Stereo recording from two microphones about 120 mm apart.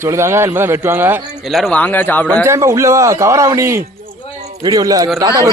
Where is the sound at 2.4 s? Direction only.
25° right (ahead or behind).